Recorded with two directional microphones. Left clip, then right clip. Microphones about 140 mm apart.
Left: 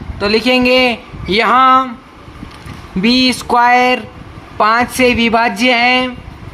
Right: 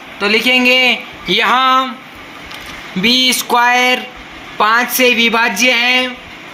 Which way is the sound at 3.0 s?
50° left (ahead or behind).